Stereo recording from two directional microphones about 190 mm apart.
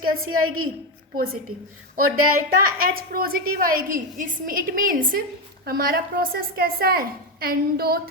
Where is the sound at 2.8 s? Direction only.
50° right (ahead or behind).